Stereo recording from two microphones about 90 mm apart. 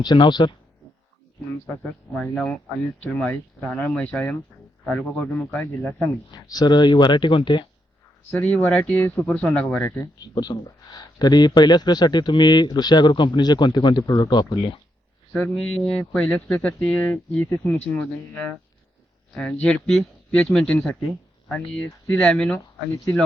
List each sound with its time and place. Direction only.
0.0 s speech: 55° left (ahead or behind)
1.8 s speech: 10° left (ahead or behind)
6.3 s speech: 50° left (ahead or behind)
8.3 s speech: 20° left (ahead or behind)
9.2 s speech: 15° left (ahead or behind)
10.0 s speech: 45° left (ahead or behind)
15.3 s speech: 10° left (ahead or behind)
17.8 s speech: 10° left (ahead or behind)
19.3 s speech: 10° left (ahead or behind)
22.1 s speech: 10° left (ahead or behind)